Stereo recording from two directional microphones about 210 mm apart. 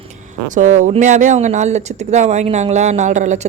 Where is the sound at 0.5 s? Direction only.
35° right (ahead or behind).